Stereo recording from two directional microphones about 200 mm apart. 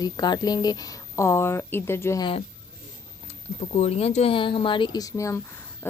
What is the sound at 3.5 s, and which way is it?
Speech, 30° left (ahead or behind).